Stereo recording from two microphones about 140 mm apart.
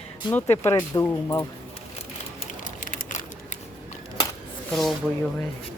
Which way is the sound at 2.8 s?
70° left (ahead or behind).